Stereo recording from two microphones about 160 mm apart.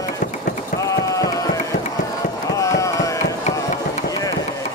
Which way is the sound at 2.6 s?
20° left (ahead or behind).